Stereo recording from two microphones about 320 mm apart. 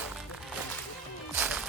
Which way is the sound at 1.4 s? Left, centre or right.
Centre.